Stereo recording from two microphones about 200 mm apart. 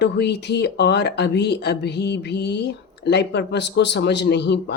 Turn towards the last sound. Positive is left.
turn(degrees=60)  # may be behind; listen again after turning